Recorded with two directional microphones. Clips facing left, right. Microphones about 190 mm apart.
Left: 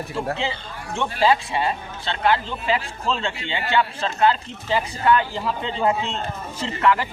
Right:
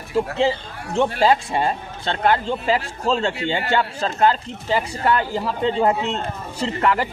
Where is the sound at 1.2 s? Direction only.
45° right (ahead or behind).